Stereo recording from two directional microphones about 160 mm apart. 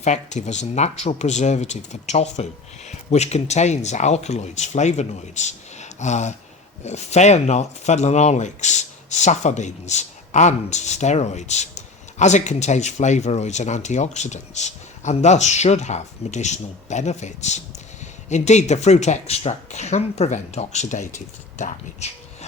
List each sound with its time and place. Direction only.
0.0 s speech: 45° left (ahead or behind)